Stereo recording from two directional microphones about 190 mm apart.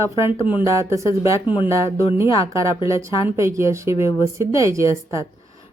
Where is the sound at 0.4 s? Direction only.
10° right (ahead or behind).